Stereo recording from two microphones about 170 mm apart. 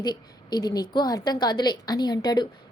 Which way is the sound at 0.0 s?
25° left (ahead or behind).